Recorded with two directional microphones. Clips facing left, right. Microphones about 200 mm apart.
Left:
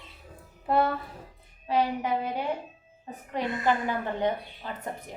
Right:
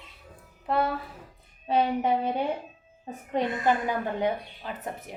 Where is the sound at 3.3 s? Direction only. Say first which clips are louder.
Right 2 dB; 20° right (ahead or behind).